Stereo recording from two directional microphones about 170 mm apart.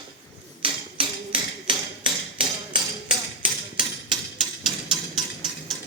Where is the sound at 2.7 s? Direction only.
30° right (ahead or behind).